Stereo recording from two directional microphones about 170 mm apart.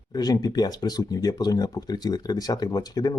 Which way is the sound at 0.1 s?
25° left (ahead or behind).